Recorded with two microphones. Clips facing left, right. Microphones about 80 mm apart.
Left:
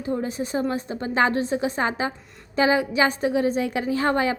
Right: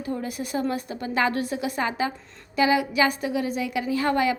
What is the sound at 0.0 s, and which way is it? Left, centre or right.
A woman's voice, left.